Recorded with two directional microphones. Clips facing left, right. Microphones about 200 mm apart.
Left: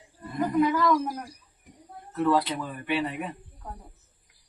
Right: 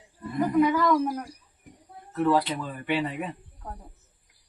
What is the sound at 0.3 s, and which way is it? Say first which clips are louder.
Speech: right 2 dB; centre (ahead or behind).